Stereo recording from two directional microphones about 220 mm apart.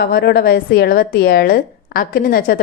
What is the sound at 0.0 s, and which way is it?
A woman's voice, 45° left (ahead or behind).